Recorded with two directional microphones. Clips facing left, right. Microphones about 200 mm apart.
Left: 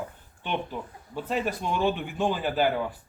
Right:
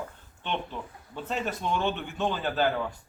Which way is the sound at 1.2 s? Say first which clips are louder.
Left 3 dB; 5° left (ahead or behind).